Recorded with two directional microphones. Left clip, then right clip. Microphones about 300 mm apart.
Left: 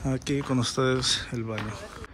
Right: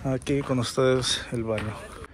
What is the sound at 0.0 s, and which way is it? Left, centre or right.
Speech, centre.